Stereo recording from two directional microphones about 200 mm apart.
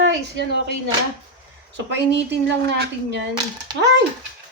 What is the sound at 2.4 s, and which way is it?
Speech, 60° right (ahead or behind).